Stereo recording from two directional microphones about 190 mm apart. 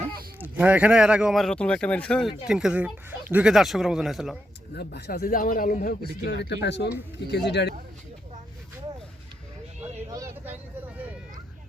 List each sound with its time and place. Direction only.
0.3 s speech: 10° right (ahead or behind)
4.8 s a man's voice: 60° left (ahead or behind)
6.2 s speech: 65° left (ahead or behind)
10.1 s vehicle: 15° right (ahead or behind)